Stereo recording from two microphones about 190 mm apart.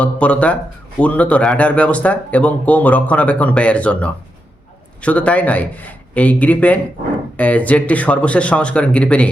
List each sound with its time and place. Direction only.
0.0 s speech: 5° left (ahead or behind)